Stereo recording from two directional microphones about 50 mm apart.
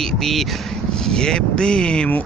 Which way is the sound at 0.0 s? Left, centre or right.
Centre.